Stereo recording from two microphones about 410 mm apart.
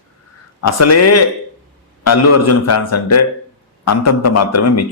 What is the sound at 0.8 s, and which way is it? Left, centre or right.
A man's voice, left.